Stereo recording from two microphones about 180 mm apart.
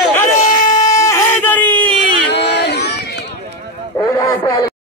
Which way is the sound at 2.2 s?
70° left (ahead or behind).